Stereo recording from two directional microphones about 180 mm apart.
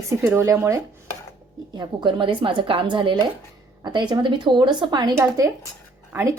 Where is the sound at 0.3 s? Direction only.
15° right (ahead or behind).